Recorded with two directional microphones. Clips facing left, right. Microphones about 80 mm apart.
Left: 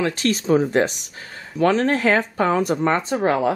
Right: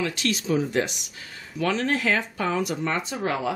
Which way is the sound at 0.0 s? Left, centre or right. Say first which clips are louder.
Left 5 dB; left.